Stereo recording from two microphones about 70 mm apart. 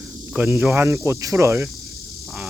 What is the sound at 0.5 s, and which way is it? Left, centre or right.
Speech, right.